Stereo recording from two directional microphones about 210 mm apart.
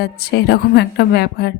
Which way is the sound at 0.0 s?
50° left (ahead or behind).